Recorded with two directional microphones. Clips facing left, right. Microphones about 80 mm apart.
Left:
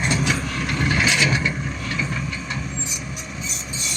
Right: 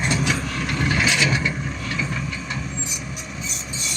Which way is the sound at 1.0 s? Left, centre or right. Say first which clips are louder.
Left 1 dB; left.